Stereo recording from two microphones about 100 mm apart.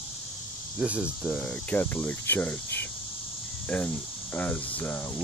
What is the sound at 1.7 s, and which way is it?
Cricket, 15° left (ahead or behind).